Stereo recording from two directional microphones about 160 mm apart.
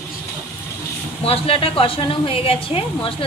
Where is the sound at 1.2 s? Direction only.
35° left (ahead or behind).